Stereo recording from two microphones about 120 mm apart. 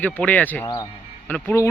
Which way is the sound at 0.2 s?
15° left (ahead or behind).